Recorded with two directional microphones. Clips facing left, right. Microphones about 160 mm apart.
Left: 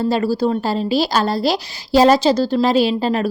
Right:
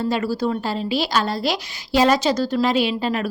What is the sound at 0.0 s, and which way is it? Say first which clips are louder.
A woman's voice: left 4 dB; 35° left (ahead or behind).